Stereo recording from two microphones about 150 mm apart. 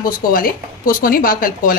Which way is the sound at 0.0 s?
70° left (ahead or behind).